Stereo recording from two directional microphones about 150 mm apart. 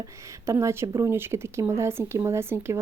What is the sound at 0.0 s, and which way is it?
Speech, 20° right (ahead or behind).